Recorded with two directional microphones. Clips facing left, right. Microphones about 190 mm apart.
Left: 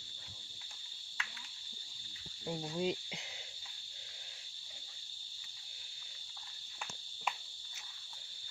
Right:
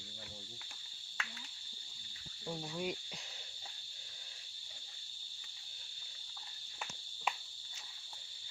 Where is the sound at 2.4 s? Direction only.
20° left (ahead or behind).